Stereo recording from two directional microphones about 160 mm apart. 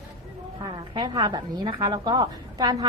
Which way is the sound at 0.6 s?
30° right (ahead or behind).